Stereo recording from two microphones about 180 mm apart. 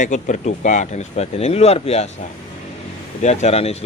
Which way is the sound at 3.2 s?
40° left (ahead or behind).